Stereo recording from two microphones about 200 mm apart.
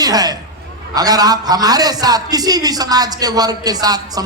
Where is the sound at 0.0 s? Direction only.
20° right (ahead or behind).